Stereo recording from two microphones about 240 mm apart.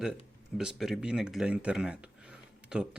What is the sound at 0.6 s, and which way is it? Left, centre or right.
A man's voice, centre.